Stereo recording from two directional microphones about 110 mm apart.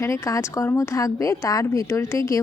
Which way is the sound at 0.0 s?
30° left (ahead or behind).